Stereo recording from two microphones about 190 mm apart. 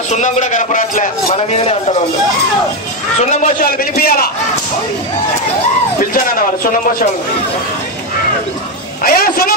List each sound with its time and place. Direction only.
0.1 s a man's voice: 40° left (ahead or behind)
3.2 s a man's voice: 40° left (ahead or behind)
5.9 s speech: 45° left (ahead or behind)
9.0 s a man's voice: 50° left (ahead or behind)